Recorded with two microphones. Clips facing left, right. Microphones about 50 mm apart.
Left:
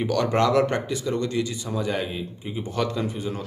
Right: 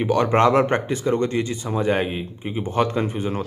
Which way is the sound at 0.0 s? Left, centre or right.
Right.